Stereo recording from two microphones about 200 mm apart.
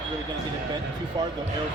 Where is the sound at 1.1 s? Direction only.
20° right (ahead or behind).